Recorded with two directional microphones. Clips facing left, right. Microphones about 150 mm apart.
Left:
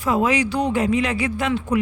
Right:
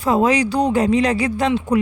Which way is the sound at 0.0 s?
35° right (ahead or behind).